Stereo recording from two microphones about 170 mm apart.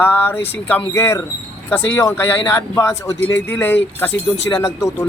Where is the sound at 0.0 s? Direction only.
15° left (ahead or behind).